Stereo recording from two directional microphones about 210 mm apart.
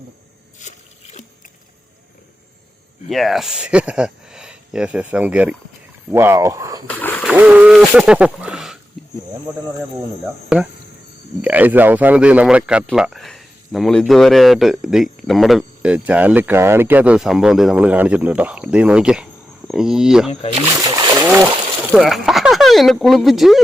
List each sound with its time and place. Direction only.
0.6 s a sound: 35° left (ahead or behind)
3.1 s speech: centre (ahead or behind); by 6.8 s 15° right (ahead or behind)
7.0 s splash: 10° left (ahead or behind)
7.3 s speech: 5° right (ahead or behind)
11.4 s speech: 5° right (ahead or behind)